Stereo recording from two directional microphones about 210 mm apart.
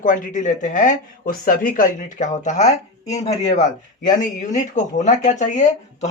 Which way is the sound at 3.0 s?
15° left (ahead or behind).